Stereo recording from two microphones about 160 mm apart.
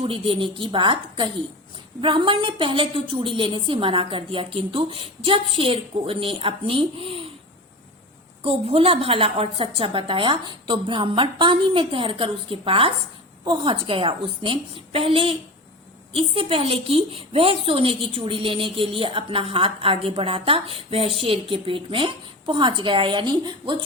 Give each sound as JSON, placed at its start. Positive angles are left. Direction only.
{"t": 0.0, "sound": "a woman's voice", "side_deg": -35}
{"t": 8.4, "sound": "a woman's voice", "side_deg": -40}